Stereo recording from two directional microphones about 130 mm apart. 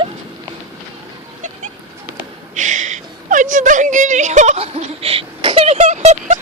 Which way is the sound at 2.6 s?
70° right (ahead or behind).